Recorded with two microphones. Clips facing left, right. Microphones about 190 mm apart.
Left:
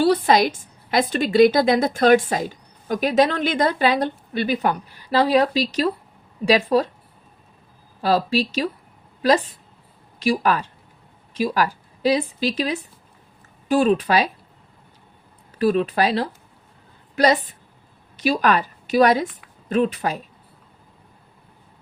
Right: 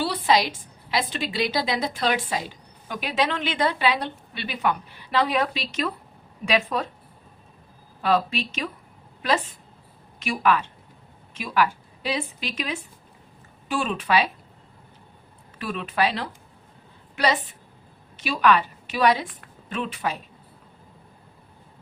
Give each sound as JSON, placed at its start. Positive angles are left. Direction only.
{"t": 0.0, "sound": "a woman's voice", "side_deg": 45}
{"t": 8.0, "sound": "speech", "side_deg": 35}
{"t": 15.5, "sound": "speech", "side_deg": 40}
{"t": 18.2, "sound": "a woman's voice", "side_deg": 40}